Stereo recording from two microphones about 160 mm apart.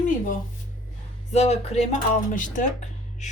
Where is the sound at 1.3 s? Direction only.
40° left (ahead or behind).